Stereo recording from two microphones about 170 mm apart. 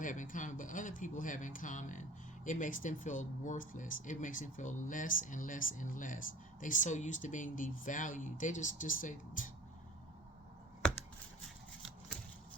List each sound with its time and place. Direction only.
0.0 s speech: 50° left (ahead or behind)